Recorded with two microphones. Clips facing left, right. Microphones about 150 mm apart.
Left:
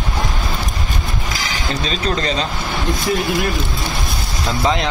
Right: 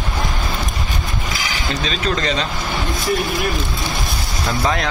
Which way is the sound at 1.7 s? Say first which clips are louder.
Left 1 dB; 35° left (ahead or behind).